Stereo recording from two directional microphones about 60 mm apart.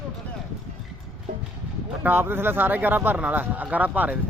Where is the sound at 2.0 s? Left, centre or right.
Right.